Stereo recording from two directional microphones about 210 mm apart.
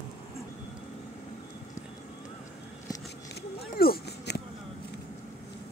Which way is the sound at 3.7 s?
45° left (ahead or behind).